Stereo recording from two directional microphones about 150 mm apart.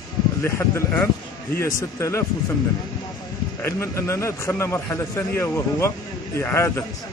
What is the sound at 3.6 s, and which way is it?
A man's voice, 20° left (ahead or behind).